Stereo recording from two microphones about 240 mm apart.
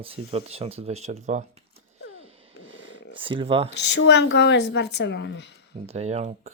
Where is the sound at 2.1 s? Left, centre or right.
Right.